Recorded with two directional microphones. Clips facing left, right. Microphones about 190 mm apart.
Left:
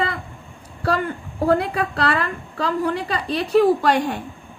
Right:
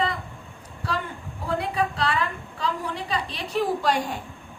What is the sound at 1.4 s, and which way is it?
A woman's voice, 65° left (ahead or behind).